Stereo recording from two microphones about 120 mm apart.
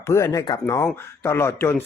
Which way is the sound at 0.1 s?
25° left (ahead or behind).